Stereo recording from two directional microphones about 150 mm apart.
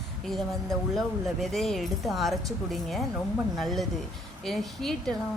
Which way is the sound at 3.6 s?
Centre (ahead or behind).